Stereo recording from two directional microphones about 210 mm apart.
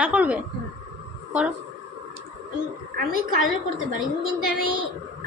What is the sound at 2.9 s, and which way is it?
Speech, 45° right (ahead or behind).